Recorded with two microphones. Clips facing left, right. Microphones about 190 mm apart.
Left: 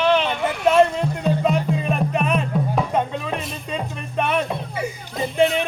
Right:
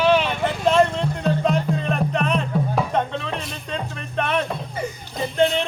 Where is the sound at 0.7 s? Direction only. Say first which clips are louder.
Left 2 dB; 5° left (ahead or behind).